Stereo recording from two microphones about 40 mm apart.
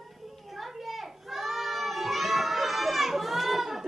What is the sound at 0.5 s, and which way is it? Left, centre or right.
Children playing, centre.